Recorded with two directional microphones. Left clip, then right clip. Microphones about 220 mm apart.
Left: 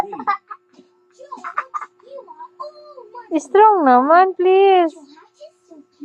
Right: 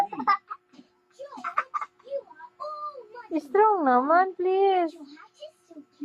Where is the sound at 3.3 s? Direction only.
20° left (ahead or behind).